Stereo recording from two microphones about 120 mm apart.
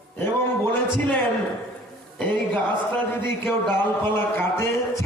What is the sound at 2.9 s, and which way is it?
A man's voice, 15° left (ahead or behind).